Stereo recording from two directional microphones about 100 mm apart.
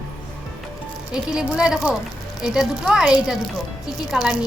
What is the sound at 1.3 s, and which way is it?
A woman's voice, 10° right (ahead or behind).